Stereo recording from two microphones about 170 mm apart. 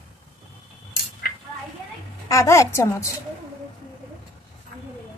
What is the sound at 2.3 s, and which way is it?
Speech, 20° left (ahead or behind).